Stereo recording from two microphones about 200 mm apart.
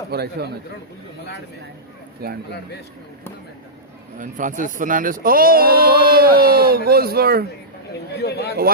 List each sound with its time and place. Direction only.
0.1 s speech: 55° right (ahead or behind)
2.2 s speech: 50° right (ahead or behind)
4.2 s speech: 40° right (ahead or behind)
8.2 s speech: 55° left (ahead or behind)